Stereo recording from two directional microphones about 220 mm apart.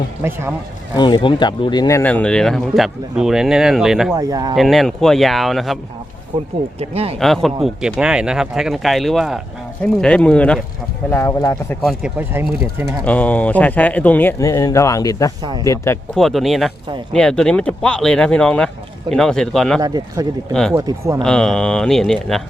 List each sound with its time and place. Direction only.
0.9 s speech: 20° left (ahead or behind); by 4.1 s centre (ahead or behind)
4.1 s speech: 15° right (ahead or behind)
4.5 s speech: centre (ahead or behind)
6.7 s speech: 25° right (ahead or behind)
7.2 s speech: centre (ahead or behind)
11.9 s speech: 5° right (ahead or behind)
13.1 s speech: 5° left (ahead or behind)
16.1 s speech: centre (ahead or behind)
19.8 s speech: 15° right (ahead or behind)
20.5 s speech: 5° left (ahead or behind)
20.7 s speech: 15° right (ahead or behind)
21.2 s speech: 5° left (ahead or behind)